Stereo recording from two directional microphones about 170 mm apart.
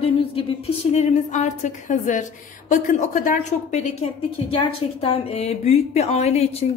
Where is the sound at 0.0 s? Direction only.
30° left (ahead or behind).